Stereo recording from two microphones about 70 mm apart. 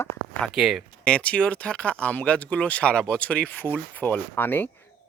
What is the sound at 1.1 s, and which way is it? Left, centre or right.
Speech, centre.